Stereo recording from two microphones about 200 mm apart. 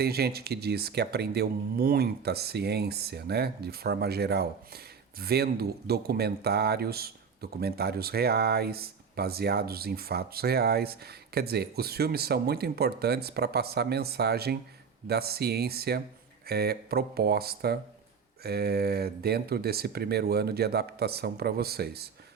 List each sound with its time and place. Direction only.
0.0 s speech: 50° right (ahead or behind)